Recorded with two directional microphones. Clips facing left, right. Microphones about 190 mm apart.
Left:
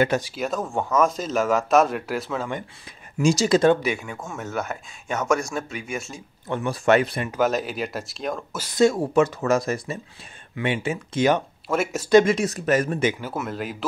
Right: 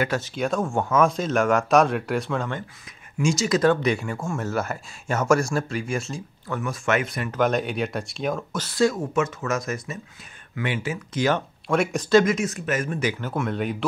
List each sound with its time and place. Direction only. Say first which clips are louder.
0.2 s speech: right 2 dB; 5° left (ahead or behind)
3.2 s speech: left 3 dB; 35° left (ahead or behind)
3.8 s speech: right 3 dB; centre (ahead or behind)
6.1 s speech: left 1 dB; 25° left (ahead or behind)
7.2 s speech: even; 5° left (ahead or behind)
8.5 s speech: left 4 dB; 15° left (ahead or behind)
11.6 s speech: right 2 dB; 5° left (ahead or behind)
12.3 s speech: left 3 dB; 35° left (ahead or behind)
13.2 s speech: right 3 dB; 5° left (ahead or behind)